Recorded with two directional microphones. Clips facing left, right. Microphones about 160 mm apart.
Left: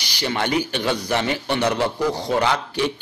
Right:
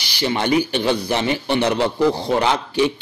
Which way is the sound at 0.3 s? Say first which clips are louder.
Right 4 dB; 20° right (ahead or behind).